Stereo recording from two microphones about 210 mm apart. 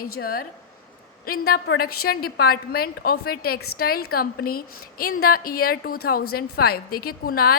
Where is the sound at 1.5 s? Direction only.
45° left (ahead or behind).